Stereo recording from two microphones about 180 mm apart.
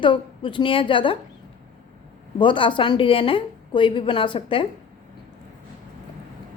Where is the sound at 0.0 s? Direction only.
25° left (ahead or behind).